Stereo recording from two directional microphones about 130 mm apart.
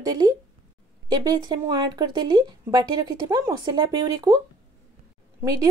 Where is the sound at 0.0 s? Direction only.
30° right (ahead or behind).